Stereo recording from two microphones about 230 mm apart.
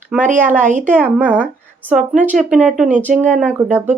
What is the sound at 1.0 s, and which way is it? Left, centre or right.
Speech, centre.